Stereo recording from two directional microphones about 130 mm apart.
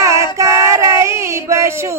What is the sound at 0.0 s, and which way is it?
Child singing, 20° right (ahead or behind).